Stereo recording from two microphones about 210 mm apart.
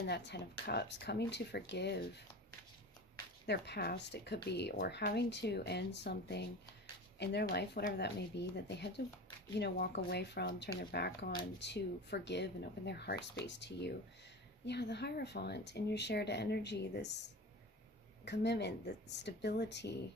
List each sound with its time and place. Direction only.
0.0 s speech: 55° left (ahead or behind)
3.4 s speech: 50° left (ahead or behind)
18.3 s speech: 55° left (ahead or behind)